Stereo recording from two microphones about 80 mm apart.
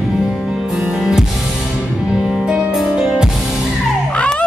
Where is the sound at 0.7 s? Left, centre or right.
Centre.